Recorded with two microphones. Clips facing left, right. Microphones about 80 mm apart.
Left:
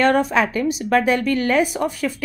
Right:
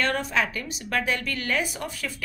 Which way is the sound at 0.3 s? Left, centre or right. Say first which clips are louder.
Left 8 dB; left.